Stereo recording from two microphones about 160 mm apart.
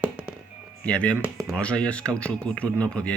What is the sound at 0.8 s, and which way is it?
Speech, 5° left (ahead or behind).